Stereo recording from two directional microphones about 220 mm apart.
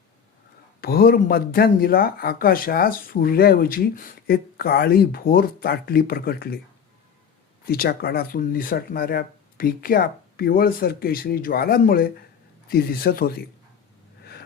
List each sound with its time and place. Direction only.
0.8 s speech: 45° left (ahead or behind)
7.6 s speech: 45° left (ahead or behind)